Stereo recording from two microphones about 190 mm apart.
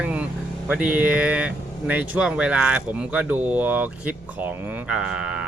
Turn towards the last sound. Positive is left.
turn(degrees=-5)  # may be behind; listen again after turning